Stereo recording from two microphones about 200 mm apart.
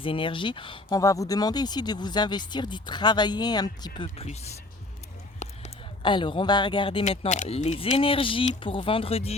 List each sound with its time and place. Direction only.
0.0 s speech: 25° left (ahead or behind)
5.4 s a sound: 35° left (ahead or behind)
6.0 s speech: 25° left (ahead or behind)